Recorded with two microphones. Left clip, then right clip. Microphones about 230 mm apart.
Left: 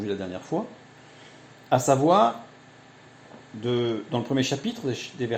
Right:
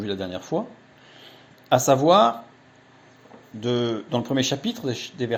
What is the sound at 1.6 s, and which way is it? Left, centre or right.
Speech, right.